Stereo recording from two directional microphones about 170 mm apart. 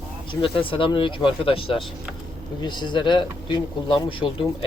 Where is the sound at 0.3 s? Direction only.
30° left (ahead or behind).